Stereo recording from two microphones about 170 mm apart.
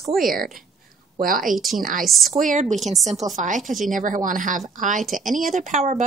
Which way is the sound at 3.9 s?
50° right (ahead or behind).